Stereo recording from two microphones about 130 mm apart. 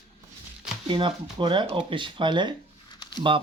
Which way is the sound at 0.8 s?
40° right (ahead or behind).